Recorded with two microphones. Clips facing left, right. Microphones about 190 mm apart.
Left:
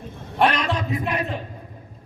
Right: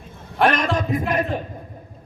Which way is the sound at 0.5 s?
45° right (ahead or behind).